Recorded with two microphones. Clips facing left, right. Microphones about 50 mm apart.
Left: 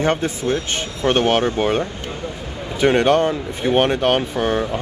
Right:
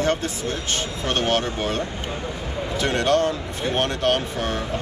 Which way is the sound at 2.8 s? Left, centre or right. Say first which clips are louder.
Left 6 dB; centre.